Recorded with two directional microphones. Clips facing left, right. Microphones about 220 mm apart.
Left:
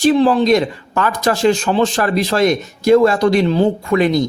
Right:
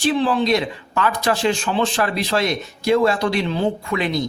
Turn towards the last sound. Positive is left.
turn(degrees=45)  # may be behind; listen again after turning